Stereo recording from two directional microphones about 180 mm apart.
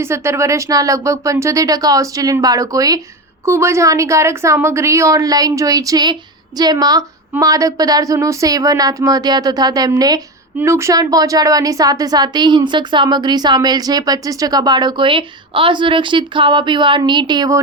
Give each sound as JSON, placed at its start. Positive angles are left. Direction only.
{"t": 0.0, "sound": "a woman's voice", "side_deg": -15}